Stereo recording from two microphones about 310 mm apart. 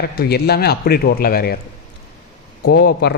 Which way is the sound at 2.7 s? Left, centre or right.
Left.